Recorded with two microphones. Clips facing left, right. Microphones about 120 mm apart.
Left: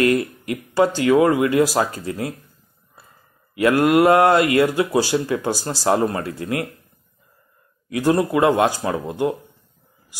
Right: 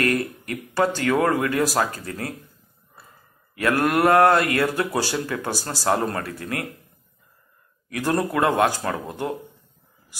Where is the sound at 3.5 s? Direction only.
20° left (ahead or behind).